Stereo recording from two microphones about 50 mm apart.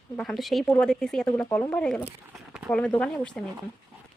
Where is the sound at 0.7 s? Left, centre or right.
Centre.